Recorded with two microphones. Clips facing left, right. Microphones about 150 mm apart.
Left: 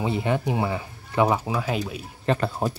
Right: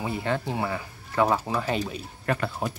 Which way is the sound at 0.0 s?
20° left (ahead or behind).